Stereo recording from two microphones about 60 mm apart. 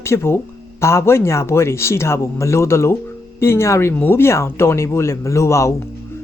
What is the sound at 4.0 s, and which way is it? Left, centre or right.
Speech, left.